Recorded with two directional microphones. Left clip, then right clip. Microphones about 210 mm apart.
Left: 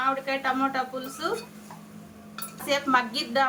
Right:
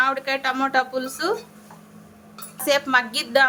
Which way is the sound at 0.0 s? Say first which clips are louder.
Right 5 dB; 55° right (ahead or behind).